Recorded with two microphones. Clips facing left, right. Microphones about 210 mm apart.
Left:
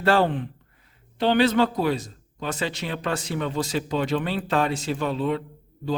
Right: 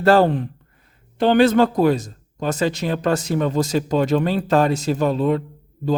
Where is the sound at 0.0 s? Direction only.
40° right (ahead or behind).